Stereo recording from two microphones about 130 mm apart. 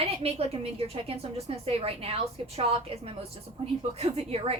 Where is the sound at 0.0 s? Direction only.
50° right (ahead or behind).